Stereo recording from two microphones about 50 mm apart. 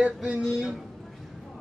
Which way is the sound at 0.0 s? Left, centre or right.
Right.